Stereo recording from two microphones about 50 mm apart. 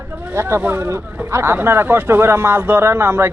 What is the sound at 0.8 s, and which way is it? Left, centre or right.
Speech, right.